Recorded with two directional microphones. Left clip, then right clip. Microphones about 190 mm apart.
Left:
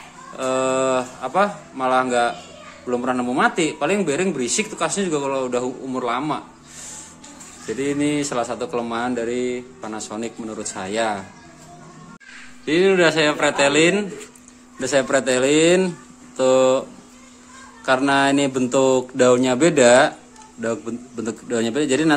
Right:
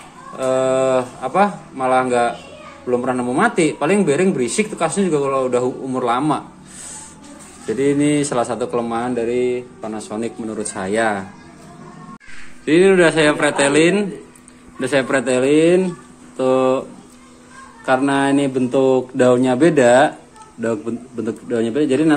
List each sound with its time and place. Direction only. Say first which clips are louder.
0.4 s speech: right 4 dB; 5° left (ahead or behind)
7.6 s speech: right 5 dB; centre (ahead or behind)
12.6 s speech: right 4 dB; 5° left (ahead or behind)
17.8 s speech: right 1 dB; 10° left (ahead or behind)
21.3 s speech: right 2 dB; 15° left (ahead or behind)